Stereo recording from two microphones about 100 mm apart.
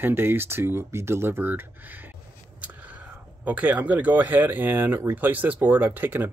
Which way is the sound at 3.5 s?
15° right (ahead or behind).